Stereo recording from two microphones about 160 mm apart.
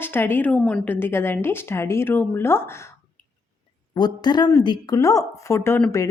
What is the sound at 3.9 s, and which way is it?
A woman's voice, 25° left (ahead or behind).